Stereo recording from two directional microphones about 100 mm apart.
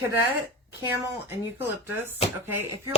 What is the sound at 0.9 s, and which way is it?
Speech, 25° right (ahead or behind).